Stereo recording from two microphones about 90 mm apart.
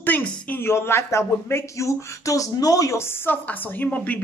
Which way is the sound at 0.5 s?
25° left (ahead or behind).